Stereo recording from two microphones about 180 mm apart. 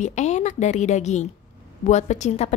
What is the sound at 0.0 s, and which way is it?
A woman's voice, 40° left (ahead or behind).